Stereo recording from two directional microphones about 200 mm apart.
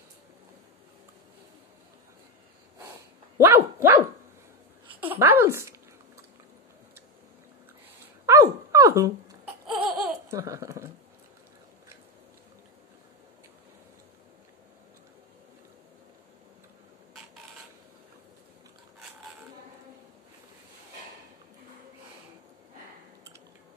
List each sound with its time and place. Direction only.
3.3 s dog: 15° right (ahead or behind)
5.1 s speech: 10° right (ahead or behind)
8.3 s dog: 15° right (ahead or behind)
9.7 s laughter: centre (ahead or behind)
10.2 s speech: 15° right (ahead or behind)